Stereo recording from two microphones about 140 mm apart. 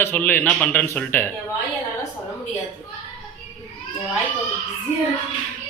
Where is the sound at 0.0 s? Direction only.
15° left (ahead or behind).